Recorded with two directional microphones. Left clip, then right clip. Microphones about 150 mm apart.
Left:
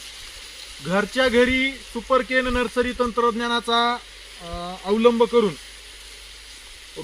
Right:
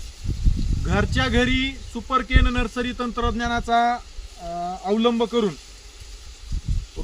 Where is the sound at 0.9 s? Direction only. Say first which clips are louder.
Left 3 dB; 25° right (ahead or behind).